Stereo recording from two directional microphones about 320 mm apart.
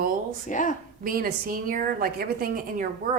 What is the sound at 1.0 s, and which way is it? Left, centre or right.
A woman's voice, right.